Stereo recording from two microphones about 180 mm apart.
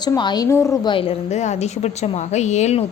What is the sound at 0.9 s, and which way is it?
A woman's voice, 30° left (ahead or behind).